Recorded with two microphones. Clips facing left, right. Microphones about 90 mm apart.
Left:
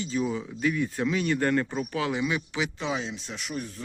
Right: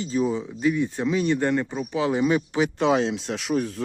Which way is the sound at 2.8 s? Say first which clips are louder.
Right 10 dB; 70° right (ahead or behind).